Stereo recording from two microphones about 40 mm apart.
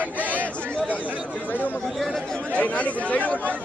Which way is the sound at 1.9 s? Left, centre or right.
Centre.